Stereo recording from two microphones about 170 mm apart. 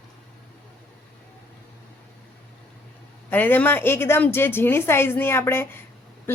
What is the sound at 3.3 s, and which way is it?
A woman's voice, 10° left (ahead or behind).